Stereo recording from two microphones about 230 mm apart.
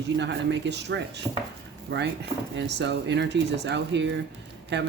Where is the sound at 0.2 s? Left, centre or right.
Right.